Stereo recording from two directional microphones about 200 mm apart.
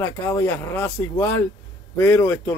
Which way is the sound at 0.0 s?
15° left (ahead or behind).